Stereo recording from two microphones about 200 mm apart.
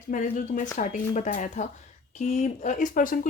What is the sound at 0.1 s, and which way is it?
Speech, 40° left (ahead or behind).